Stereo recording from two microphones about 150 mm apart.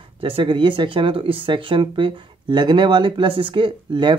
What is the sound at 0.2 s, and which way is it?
Speech, 35° right (ahead or behind).